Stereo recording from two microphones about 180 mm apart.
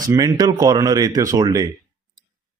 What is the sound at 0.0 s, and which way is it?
Speech, 20° right (ahead or behind).